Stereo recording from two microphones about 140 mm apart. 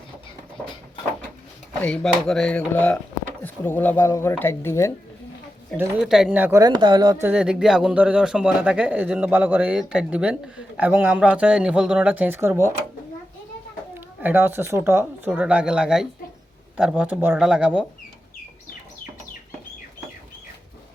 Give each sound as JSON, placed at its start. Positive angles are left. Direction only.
{"t": 1.8, "sound": "speech", "side_deg": 5}
{"t": 6.0, "sound": "speech", "side_deg": -5}
{"t": 6.4, "sound": "speech", "side_deg": -25}
{"t": 7.3, "sound": "speech", "side_deg": -5}
{"t": 14.2, "sound": "speech", "side_deg": -15}